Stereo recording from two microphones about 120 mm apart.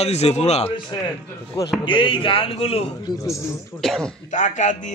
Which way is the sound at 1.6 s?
30° left (ahead or behind).